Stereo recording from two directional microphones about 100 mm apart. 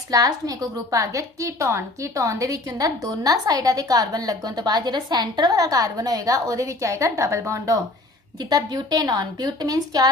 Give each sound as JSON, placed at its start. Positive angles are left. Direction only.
{"t": 0.1, "sound": "a woman's voice", "side_deg": -35}